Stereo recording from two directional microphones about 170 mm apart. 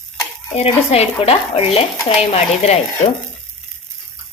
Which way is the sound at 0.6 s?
35° left (ahead or behind).